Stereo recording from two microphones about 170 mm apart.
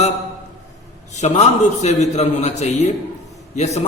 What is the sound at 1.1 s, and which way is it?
A man's voice, 40° left (ahead or behind).